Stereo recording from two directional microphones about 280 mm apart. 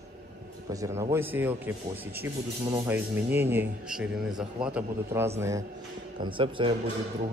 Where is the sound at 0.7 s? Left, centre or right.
Centre.